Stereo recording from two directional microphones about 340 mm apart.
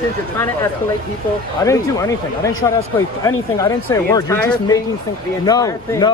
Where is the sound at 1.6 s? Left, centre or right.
Centre.